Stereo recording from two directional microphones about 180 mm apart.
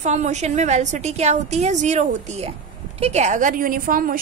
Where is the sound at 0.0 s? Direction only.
40° right (ahead or behind).